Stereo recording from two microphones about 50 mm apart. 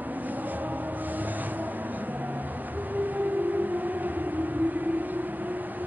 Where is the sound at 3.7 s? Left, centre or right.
Right.